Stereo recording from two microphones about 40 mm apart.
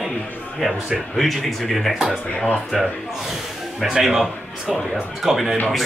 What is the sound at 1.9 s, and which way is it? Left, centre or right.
Speech, right.